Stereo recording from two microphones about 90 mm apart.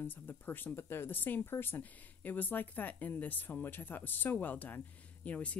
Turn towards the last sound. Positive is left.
turn(degrees=15)  # may be behind; listen again after turning